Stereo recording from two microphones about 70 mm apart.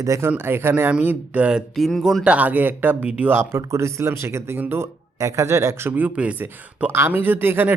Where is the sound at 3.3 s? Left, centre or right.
Right.